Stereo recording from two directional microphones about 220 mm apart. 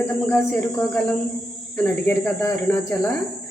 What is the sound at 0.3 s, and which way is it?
Speech, 10° left (ahead or behind).